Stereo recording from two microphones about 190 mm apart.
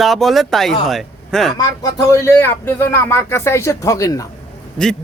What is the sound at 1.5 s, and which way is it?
Speech, 20° left (ahead or behind).